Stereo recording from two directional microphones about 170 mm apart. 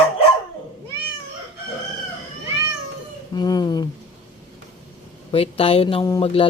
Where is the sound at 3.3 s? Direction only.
25° left (ahead or behind).